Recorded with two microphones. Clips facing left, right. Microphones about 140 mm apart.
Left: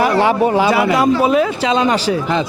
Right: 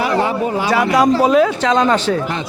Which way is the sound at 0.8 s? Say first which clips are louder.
Even; 5° left (ahead or behind).